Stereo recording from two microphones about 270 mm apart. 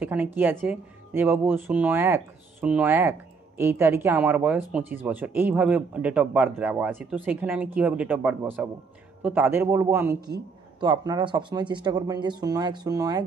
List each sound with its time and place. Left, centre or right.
0.0 s speech: centre